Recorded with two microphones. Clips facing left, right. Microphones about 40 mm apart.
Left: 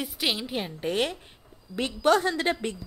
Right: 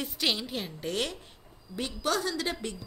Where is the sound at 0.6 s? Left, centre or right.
Left.